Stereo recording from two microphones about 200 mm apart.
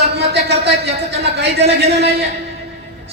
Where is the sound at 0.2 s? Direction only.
55° right (ahead or behind).